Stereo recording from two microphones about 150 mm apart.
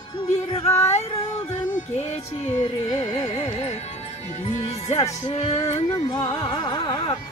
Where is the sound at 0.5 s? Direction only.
40° left (ahead or behind).